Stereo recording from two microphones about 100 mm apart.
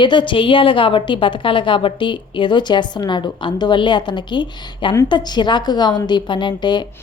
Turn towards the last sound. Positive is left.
turn(degrees=50)  # may be behind; listen again after turning